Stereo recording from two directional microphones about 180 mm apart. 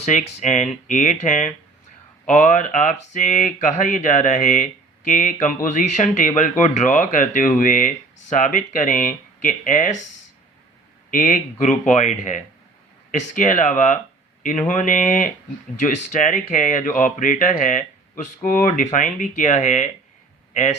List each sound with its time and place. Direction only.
0.0 s speech: 40° left (ahead or behind)
11.1 s speech: 50° left (ahead or behind)